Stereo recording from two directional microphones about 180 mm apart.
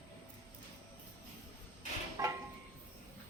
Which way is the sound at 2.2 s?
20° right (ahead or behind).